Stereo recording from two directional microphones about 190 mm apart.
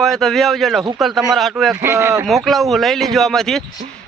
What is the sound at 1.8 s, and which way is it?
Speech, 15° right (ahead or behind).